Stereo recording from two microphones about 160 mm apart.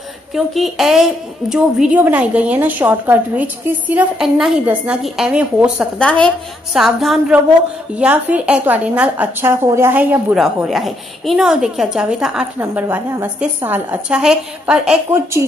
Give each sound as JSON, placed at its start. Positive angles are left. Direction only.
{"t": 0.3, "sound": "a woman's voice", "side_deg": 0}
{"t": 5.9, "sound": "a woman's voice", "side_deg": 5}
{"t": 15.0, "sound": "a woman's voice", "side_deg": -15}